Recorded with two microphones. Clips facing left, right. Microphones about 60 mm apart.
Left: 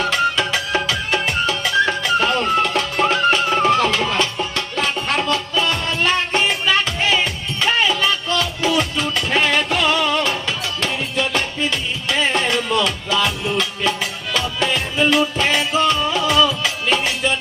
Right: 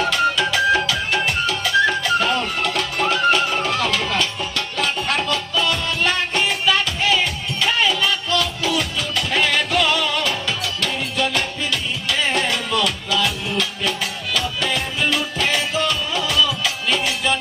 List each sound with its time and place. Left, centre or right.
0.1 s music: left